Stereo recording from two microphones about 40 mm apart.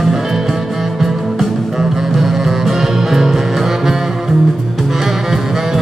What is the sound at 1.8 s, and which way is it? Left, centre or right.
Music, centre.